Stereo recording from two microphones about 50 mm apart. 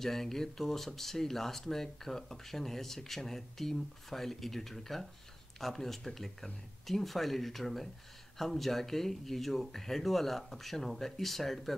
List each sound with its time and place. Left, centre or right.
0.0 s speech: centre